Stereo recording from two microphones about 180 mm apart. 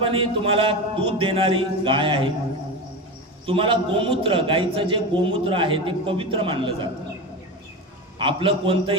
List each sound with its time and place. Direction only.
0.0 s a man's voice: 30° right (ahead or behind)
3.4 s a man's voice: 30° right (ahead or behind)
8.2 s a man's voice: 30° right (ahead or behind)